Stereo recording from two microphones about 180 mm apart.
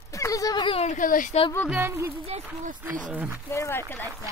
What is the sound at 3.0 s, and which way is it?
Speech, 10° right (ahead or behind).